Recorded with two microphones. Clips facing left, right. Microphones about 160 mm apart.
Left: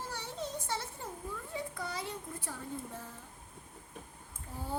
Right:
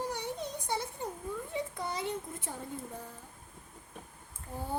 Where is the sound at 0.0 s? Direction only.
15° right (ahead or behind).